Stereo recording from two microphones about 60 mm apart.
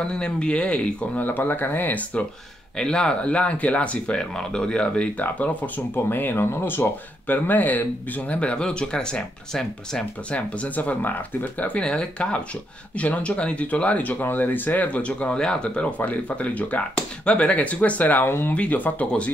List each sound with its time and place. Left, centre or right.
0.0 s speech: centre
1.2 s speech: left
2.8 s speech: centre
10.3 s speech: left
18.5 s speech: left